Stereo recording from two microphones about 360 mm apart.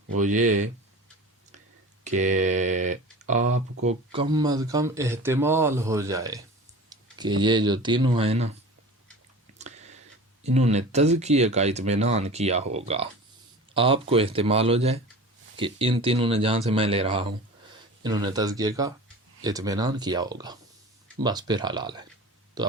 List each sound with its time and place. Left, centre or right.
0.1 s speech: right
2.0 s speech: centre
9.6 s a sound: centre
10.4 s speech: centre